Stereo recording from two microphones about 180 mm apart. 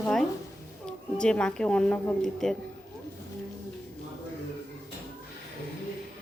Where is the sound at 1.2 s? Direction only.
5° left (ahead or behind).